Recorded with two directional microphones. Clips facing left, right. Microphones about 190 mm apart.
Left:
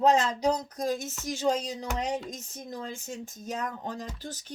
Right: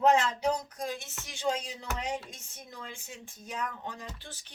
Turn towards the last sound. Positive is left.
turn(degrees=40)  # may be behind; listen again after turning